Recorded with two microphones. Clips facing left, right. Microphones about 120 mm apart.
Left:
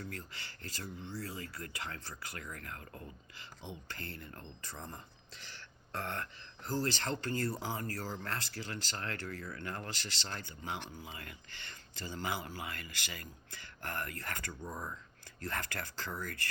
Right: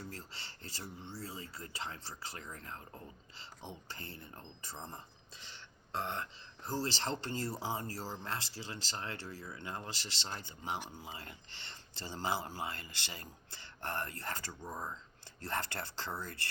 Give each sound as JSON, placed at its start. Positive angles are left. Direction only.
{"t": 0.0, "sound": "speech", "side_deg": -30}
{"t": 15.4, "sound": "speech", "side_deg": -30}